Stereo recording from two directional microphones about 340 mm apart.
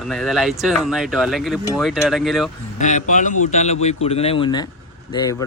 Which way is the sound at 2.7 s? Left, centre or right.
Left.